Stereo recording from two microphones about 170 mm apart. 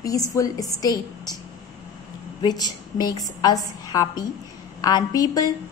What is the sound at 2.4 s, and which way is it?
A woman's voice, 25° left (ahead or behind).